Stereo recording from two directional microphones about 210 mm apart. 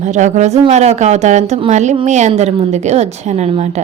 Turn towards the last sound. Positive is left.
turn(degrees=-30)  # may be behind; listen again after turning